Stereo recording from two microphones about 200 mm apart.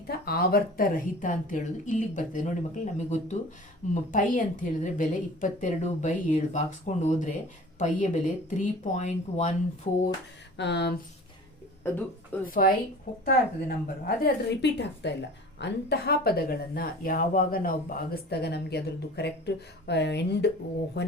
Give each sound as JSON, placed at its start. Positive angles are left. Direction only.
{"t": 0.1, "sound": "a woman's voice", "side_deg": 50}
{"t": 10.6, "sound": "speech", "side_deg": 55}
{"t": 11.8, "sound": "speech", "side_deg": 10}
{"t": 12.5, "sound": "speech", "side_deg": 45}
{"t": 14.5, "sound": "speech", "side_deg": 60}